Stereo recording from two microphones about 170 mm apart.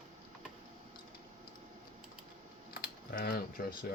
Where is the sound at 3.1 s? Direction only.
60° left (ahead or behind).